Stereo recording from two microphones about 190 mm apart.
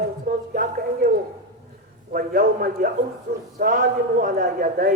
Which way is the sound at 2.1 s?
45° right (ahead or behind).